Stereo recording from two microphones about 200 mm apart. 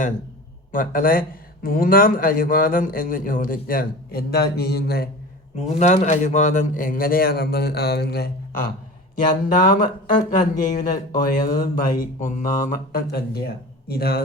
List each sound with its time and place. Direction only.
0.7 s a man's voice: 45° left (ahead or behind)
5.5 s a man's voice: 35° left (ahead or behind); by 8.3 s 55° left (ahead or behind)
9.6 s a man's voice: 40° left (ahead or behind)